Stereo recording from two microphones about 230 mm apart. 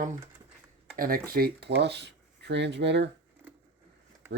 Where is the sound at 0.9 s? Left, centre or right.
Right.